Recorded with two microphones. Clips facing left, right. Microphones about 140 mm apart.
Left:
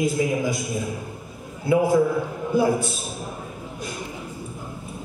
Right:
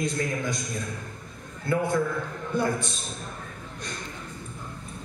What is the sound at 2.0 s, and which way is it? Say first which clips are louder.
Speech: left 7 dB; 25° left (ahead or behind).